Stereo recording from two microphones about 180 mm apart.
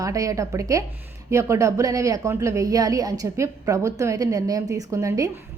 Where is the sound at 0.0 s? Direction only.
20° right (ahead or behind).